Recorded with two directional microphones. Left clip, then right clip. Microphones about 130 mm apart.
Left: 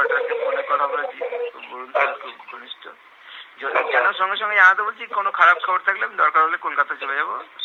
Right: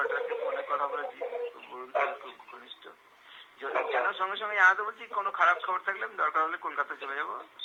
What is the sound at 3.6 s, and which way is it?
Speech, 35° left (ahead or behind).